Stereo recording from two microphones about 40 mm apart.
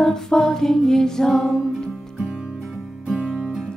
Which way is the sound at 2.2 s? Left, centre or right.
Centre.